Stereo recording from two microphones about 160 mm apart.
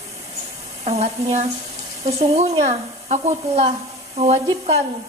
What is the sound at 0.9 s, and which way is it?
A woman's voice, 45° right (ahead or behind).